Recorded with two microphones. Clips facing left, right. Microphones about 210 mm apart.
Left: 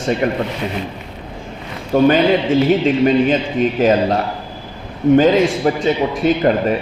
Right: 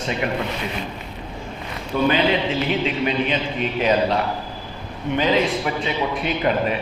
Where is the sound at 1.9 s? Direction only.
45° left (ahead or behind).